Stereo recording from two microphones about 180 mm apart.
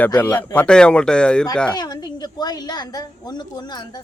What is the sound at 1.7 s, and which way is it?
A woman's voice, 25° left (ahead or behind).